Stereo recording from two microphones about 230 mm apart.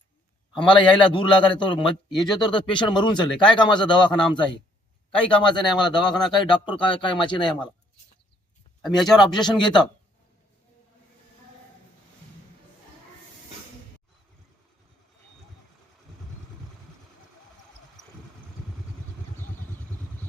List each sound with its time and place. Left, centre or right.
0.5 s a man's voice: left
5.4 s a man's voice: centre
8.8 s speech: centre
9.1 s a man's voice: centre